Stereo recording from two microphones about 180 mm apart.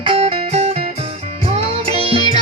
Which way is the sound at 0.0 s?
30° right (ahead or behind).